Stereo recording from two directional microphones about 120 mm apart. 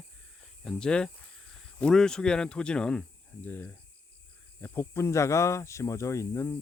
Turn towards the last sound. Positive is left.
turn(degrees=25)  # may be behind; listen again after turning